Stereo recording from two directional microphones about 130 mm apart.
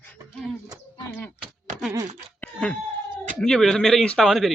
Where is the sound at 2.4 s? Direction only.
10° left (ahead or behind).